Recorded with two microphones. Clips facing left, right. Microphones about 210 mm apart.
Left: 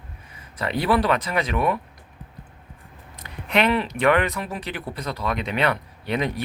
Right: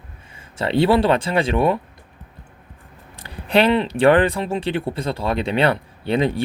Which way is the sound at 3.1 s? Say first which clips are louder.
Right 5 dB; 30° right (ahead or behind).